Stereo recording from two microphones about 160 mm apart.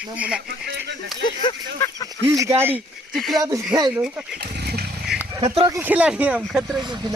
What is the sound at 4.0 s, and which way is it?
Speech, 5° right (ahead or behind).